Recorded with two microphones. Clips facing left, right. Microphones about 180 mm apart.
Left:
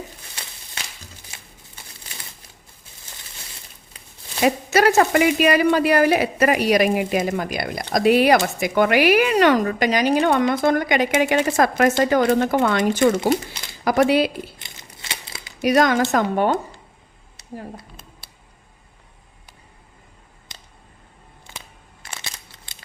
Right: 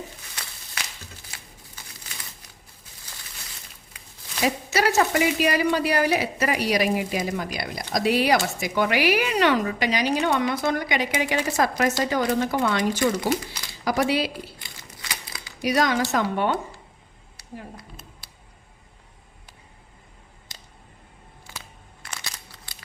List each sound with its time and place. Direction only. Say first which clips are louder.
1.3 s crumpling: left 1 dB; 25° left (ahead or behind)
4.4 s a woman's voice: left 6 dB; 55° left (ahead or behind)
14.6 s crumpling: even; 25° left (ahead or behind)
15.6 s a woman's voice: left 5 dB; 50° left (ahead or behind)
22.0 s a sound: left 1 dB; 25° left (ahead or behind)